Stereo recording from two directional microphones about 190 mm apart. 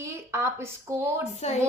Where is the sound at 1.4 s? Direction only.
35° left (ahead or behind).